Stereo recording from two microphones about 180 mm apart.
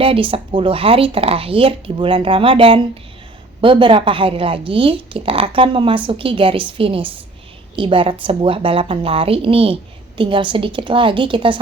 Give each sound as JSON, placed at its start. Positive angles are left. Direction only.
{"t": 0.0, "sound": "a woman's voice", "side_deg": -30}